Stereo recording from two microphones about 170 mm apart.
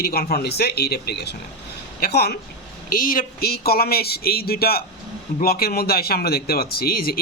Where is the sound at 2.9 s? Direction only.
55° left (ahead or behind).